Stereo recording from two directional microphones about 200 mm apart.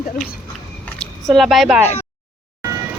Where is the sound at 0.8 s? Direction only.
Centre (ahead or behind).